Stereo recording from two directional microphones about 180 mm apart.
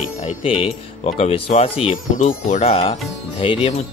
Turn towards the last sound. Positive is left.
turn(degrees=30)  # may be behind; listen again after turning